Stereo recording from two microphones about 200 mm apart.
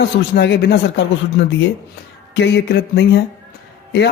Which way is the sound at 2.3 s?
55° left (ahead or behind).